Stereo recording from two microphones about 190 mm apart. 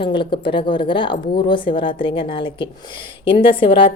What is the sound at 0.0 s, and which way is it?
A woman's voice, 25° left (ahead or behind).